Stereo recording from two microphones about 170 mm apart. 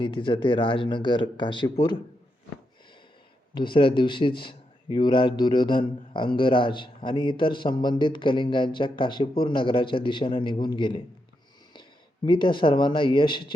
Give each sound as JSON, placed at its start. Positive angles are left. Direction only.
{"t": 0.0, "sound": "a man's voice", "side_deg": 30}
{"t": 3.5, "sound": "a man's voice", "side_deg": 30}